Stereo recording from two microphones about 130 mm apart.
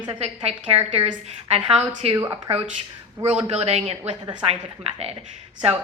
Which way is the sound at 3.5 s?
55° right (ahead or behind).